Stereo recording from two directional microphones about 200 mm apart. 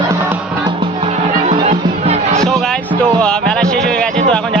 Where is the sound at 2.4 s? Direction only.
Centre (ahead or behind).